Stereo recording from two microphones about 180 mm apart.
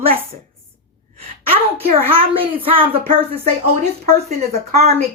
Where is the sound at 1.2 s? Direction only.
35° right (ahead or behind).